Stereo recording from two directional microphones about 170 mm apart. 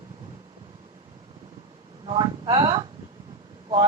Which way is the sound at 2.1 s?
25° right (ahead or behind).